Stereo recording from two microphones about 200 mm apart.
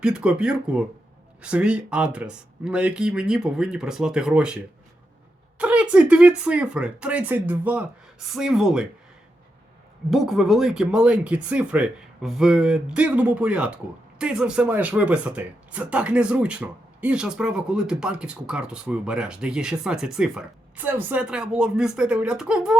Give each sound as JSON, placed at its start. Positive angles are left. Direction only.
{"t": 0.0, "sound": "speech", "side_deg": -5}
{"t": 10.1, "sound": "speech", "side_deg": 0}